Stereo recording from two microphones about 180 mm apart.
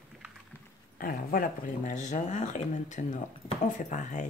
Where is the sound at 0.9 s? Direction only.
50° left (ahead or behind).